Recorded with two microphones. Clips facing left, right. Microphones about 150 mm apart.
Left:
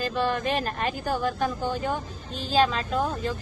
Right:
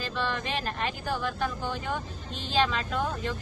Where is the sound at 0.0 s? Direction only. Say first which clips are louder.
Left 6 dB; 45° left (ahead or behind).